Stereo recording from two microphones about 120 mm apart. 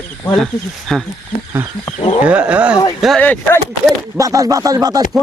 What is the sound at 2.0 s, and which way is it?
Speech, 55° left (ahead or behind).